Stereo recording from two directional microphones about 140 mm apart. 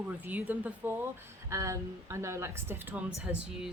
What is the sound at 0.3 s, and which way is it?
Speech, 10° right (ahead or behind).